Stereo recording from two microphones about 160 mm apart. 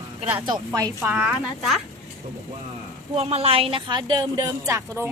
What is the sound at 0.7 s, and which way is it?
Speech, 20° right (ahead or behind).